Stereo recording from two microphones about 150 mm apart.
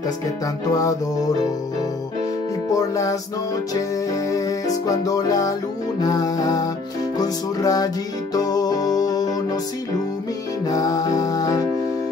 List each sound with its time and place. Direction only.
2.7 s music: 20° left (ahead or behind)
4.3 s music: 20° left (ahead or behind)
10.7 s music: 25° left (ahead or behind)